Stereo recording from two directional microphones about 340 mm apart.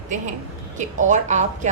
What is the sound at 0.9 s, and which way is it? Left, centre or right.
Speech, right.